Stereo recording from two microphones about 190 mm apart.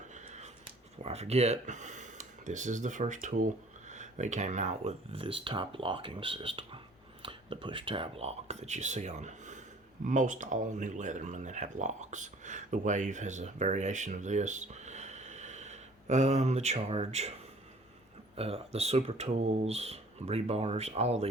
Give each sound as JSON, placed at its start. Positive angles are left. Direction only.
{"t": 0.1, "sound": "a sound", "side_deg": -35}
{"t": 1.0, "sound": "speech", "side_deg": -35}
{"t": 18.3, "sound": "speech", "side_deg": -30}